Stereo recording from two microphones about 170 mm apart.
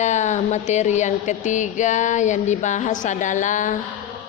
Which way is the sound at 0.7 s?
45° left (ahead or behind).